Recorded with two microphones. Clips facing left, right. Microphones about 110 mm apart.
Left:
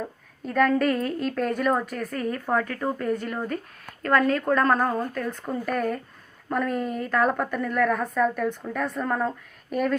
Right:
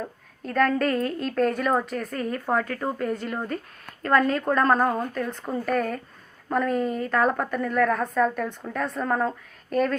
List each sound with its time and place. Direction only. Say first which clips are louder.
0.4 s a woman's voice: left 1 dB; 5° left (ahead or behind)
2.8 s speech: left 1 dB; 15° right (ahead or behind)
4.0 s a woman's voice: even; centre (ahead or behind)
9.6 s speech: right 2 dB; 10° left (ahead or behind)